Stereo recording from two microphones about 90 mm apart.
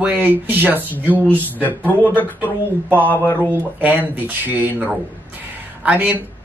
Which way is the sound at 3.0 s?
20° left (ahead or behind).